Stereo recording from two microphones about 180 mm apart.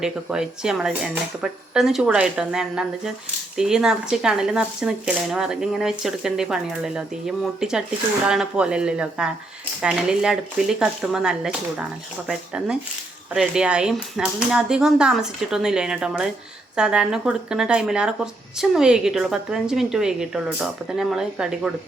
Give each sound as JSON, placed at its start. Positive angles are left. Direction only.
{"t": 0.0, "sound": "speech", "side_deg": -5}